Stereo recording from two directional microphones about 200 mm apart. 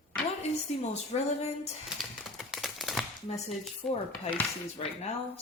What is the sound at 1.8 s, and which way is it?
Typing, centre (ahead or behind).